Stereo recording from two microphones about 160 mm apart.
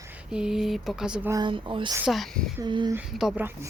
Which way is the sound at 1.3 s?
25° right (ahead or behind).